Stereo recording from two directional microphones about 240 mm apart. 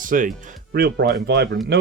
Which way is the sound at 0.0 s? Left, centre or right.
Right.